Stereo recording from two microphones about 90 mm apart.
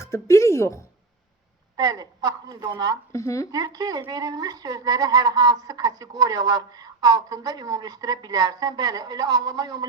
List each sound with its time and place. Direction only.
0.0 s speech: 35° left (ahead or behind)
1.7 s a woman's voice: 45° right (ahead or behind)
3.1 s speech: 35° left (ahead or behind)
3.5 s a woman's voice: 45° right (ahead or behind)